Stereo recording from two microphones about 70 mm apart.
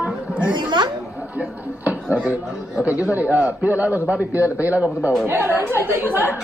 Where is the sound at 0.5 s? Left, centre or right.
Right.